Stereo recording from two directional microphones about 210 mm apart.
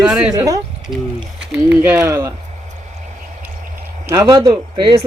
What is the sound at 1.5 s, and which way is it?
Speech, 5° right (ahead or behind).